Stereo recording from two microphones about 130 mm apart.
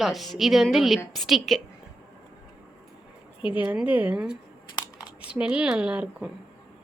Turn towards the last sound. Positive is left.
turn(degrees=-10)  # may be behind; listen again after turning